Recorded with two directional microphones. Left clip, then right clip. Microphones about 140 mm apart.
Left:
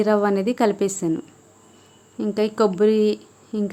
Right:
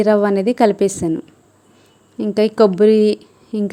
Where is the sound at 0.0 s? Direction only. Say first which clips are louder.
Right 5 dB; 30° right (ahead or behind).